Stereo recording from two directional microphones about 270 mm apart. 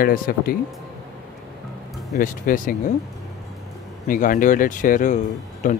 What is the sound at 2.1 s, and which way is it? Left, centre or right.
Speech, left.